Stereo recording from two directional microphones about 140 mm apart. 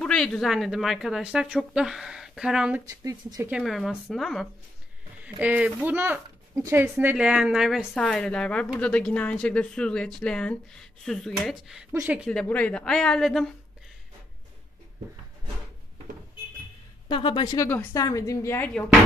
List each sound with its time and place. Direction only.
0.0 s a woman's voice: 5° left (ahead or behind)
2.8 s speech: 25° right (ahead or behind)
3.4 s a woman's voice: 5° right (ahead or behind)
5.4 s a woman's voice: 10° right (ahead or behind)
12.3 s a woman's voice: 10° left (ahead or behind)
17.1 s speech: 35° left (ahead or behind)
17.6 s a woman's voice: 15° left (ahead or behind)